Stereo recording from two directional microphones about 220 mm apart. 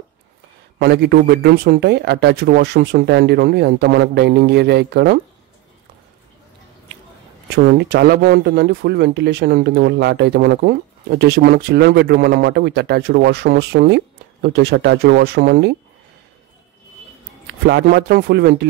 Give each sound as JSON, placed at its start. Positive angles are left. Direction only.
{"t": 0.7, "sound": "speech", "side_deg": -50}
{"t": 7.5, "sound": "speech", "side_deg": -50}
{"t": 17.5, "sound": "speech", "side_deg": -50}